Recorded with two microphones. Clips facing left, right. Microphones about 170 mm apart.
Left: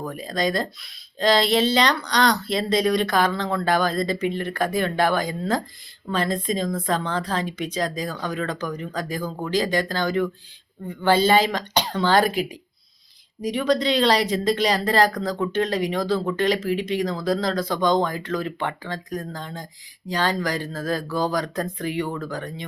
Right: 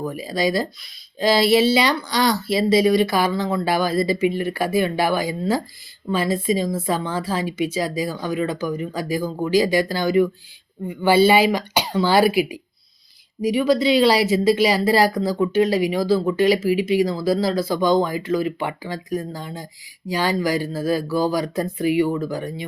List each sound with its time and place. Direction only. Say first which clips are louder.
0.0 s speech: right 3 dB; 5° right (ahead or behind)